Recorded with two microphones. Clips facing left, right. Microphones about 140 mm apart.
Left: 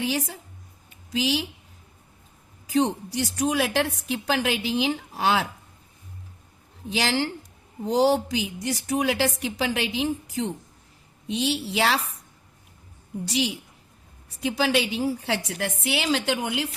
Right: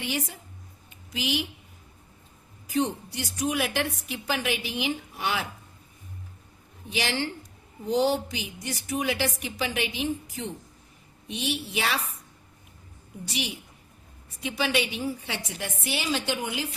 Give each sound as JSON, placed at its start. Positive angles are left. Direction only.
{"t": 0.0, "sound": "a woman's voice", "side_deg": 90}
{"t": 2.7, "sound": "a woman's voice", "side_deg": 90}
{"t": 6.9, "sound": "a woman's voice", "side_deg": 90}
{"t": 14.4, "sound": "a woman's voice", "side_deg": 90}